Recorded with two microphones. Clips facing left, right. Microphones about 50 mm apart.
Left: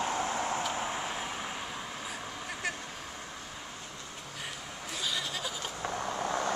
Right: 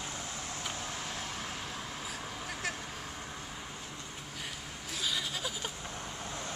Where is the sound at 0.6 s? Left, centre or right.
Left; by 2.7 s centre.